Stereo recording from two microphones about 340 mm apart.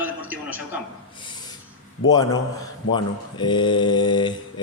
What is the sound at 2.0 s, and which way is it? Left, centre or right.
Speech, centre.